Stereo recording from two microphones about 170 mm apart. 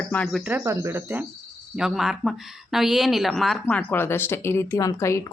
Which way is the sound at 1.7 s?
5° right (ahead or behind).